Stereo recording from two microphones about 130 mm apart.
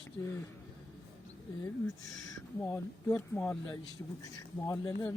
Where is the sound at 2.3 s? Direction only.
20° left (ahead or behind).